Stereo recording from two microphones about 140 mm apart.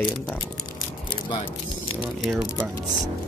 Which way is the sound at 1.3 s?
40° left (ahead or behind).